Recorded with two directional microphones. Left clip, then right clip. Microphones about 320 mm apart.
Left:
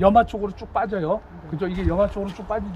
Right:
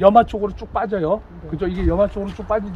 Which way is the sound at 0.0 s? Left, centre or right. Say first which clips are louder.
Right 4 dB; centre.